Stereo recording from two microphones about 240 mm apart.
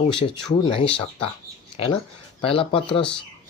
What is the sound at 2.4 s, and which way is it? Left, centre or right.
Speech, left.